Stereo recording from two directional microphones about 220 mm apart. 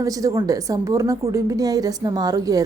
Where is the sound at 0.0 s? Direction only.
15° right (ahead or behind).